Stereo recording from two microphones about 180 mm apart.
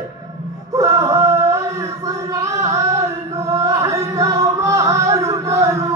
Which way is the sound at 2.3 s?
15° right (ahead or behind).